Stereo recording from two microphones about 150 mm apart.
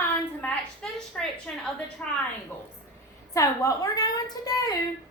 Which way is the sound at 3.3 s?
20° left (ahead or behind).